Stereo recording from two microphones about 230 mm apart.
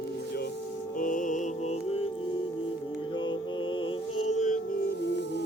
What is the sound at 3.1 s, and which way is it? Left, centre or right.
Music, left.